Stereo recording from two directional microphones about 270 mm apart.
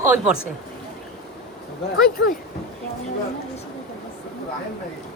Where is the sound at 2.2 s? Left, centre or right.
Left.